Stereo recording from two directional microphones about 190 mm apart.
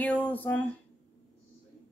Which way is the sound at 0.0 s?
10° left (ahead or behind).